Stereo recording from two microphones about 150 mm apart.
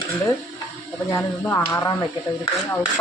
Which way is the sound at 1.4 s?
15° left (ahead or behind).